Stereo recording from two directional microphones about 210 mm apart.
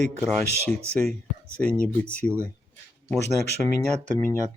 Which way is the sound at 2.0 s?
5° left (ahead or behind).